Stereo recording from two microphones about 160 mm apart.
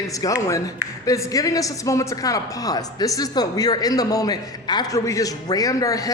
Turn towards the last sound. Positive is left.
turn(degrees=20)  # may be behind; listen again after turning